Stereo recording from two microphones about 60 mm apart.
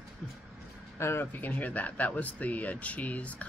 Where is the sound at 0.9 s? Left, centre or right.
Left.